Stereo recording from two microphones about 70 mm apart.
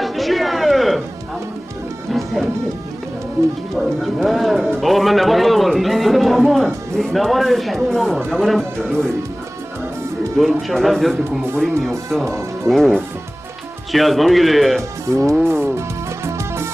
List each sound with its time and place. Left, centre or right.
0.0 s a sound: centre
2.0 s music: centre
3.7 s speech: centre
4.7 s a sound: centre
8.3 s speech: centre
10.3 s speech: centre
12.6 s speech: centre
14.8 s speech: right
15.4 s music: right